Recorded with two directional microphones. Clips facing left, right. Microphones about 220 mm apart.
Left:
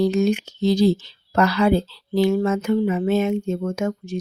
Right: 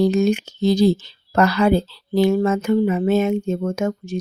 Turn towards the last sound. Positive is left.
turn(degrees=-40)  # may be behind; listen again after turning